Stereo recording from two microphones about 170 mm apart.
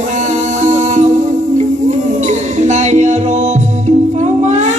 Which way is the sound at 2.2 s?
45° right (ahead or behind).